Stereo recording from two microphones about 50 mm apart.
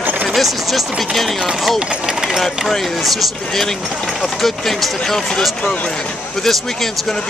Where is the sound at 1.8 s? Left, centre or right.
Centre.